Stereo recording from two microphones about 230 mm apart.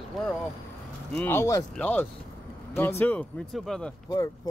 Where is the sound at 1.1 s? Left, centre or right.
Centre.